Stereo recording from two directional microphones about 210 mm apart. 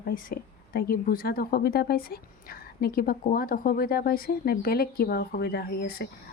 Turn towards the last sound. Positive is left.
turn(degrees=45)  # may be behind; listen again after turning